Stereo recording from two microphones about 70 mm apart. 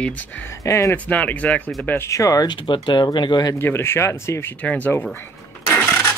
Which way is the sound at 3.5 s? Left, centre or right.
Left.